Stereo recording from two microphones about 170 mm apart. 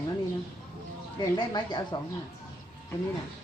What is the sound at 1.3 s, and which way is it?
Speech, 25° left (ahead or behind).